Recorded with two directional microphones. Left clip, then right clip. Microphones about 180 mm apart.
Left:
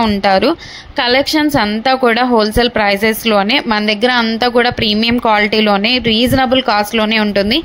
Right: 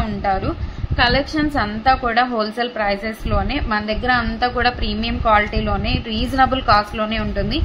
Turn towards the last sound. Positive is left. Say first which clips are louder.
# left 10 dB
turn(degrees=35)  # may be behind; listen again after turning